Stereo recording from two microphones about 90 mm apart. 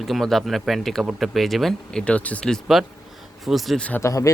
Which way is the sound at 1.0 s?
10° right (ahead or behind).